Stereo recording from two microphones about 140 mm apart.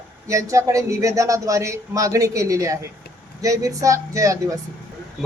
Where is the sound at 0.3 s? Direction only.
20° right (ahead or behind).